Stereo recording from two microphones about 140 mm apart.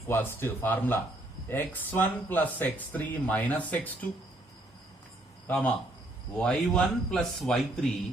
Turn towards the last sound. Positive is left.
turn(degrees=5)  # may be behind; listen again after turning